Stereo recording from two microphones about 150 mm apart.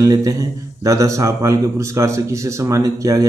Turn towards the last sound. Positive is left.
turn(degrees=-20)  # may be behind; listen again after turning